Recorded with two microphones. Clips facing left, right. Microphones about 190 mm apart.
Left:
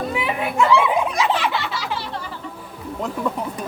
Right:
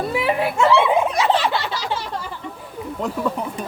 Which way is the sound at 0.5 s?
25° right (ahead or behind).